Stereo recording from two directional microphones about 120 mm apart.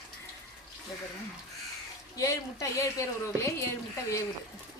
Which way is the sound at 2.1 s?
25° left (ahead or behind).